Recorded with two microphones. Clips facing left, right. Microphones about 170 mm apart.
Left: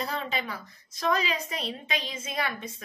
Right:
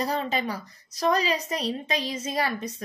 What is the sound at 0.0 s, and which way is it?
A woman's voice, 40° right (ahead or behind).